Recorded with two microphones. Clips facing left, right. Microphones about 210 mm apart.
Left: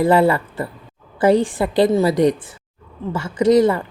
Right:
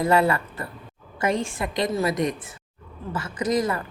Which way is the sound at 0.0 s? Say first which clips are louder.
Left 6 dB; 30° left (ahead or behind).